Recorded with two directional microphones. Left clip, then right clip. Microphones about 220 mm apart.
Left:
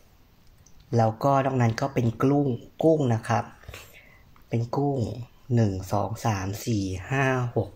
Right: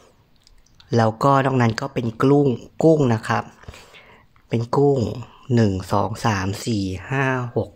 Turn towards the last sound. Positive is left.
turn(degrees=-25)  # may be behind; listen again after turning